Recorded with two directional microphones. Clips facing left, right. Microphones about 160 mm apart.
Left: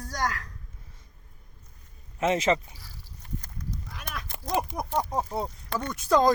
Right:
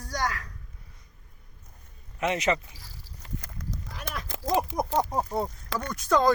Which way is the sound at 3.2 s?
90° right.